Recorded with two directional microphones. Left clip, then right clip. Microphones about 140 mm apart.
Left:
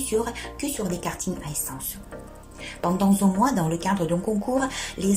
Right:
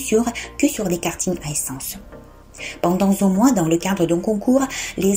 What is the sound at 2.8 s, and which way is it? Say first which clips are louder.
Speech: right 5 dB; 15° right (ahead or behind).